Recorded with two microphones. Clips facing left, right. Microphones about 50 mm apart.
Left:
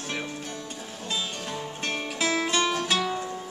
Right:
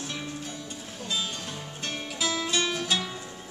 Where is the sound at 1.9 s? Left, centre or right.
Left.